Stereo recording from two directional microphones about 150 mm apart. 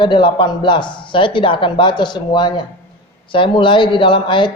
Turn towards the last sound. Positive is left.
turn(degrees=30)  # may be behind; listen again after turning